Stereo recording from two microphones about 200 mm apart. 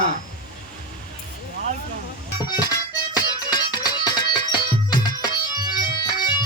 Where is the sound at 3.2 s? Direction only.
20° left (ahead or behind).